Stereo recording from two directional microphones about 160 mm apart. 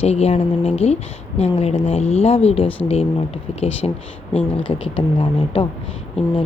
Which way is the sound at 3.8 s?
30° left (ahead or behind).